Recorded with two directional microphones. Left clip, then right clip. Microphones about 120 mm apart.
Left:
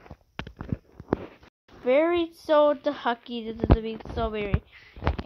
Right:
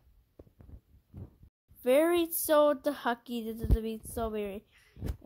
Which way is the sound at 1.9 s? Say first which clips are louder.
Left 4 dB; 15° right (ahead or behind).